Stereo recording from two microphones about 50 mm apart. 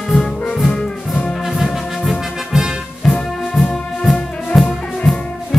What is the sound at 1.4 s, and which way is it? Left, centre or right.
Music, centre.